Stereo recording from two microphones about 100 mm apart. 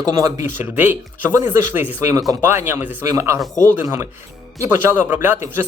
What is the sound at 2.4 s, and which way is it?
Speech, 20° right (ahead or behind).